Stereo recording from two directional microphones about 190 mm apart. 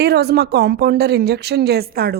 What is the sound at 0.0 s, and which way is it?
Speech, 60° right (ahead or behind).